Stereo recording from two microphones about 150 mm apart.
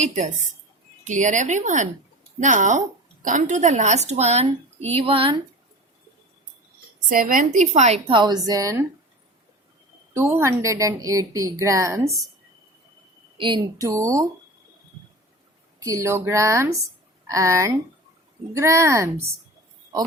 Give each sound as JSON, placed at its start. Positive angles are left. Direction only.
{"t": 0.0, "sound": "a woman's voice", "side_deg": -50}
{"t": 7.1, "sound": "a woman's voice", "side_deg": -65}
{"t": 10.2, "sound": "a woman's voice", "side_deg": -15}
{"t": 13.3, "sound": "a woman's voice", "side_deg": -30}
{"t": 13.8, "sound": "a woman's voice", "side_deg": -20}
{"t": 15.8, "sound": "a woman's voice", "side_deg": -20}